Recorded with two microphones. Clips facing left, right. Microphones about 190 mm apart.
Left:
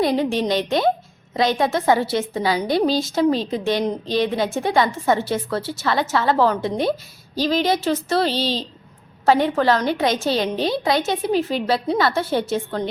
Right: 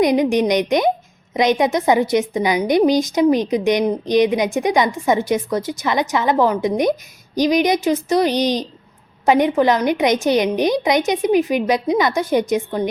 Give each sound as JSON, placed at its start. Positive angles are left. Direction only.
{"t": 0.0, "sound": "a woman's voice", "side_deg": -15}